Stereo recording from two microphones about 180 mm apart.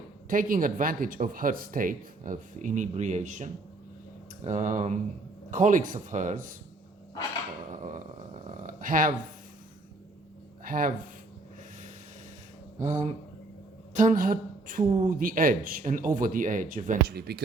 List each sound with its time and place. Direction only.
0.3 s speech: 50° right (ahead or behind)
7.7 s a sound: 45° right (ahead or behind)
10.6 s speech: 50° right (ahead or behind)
12.8 s speech: 40° right (ahead or behind)
17.2 s speech: 65° right (ahead or behind)